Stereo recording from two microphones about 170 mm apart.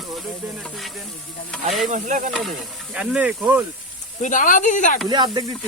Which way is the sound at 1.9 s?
45° right (ahead or behind).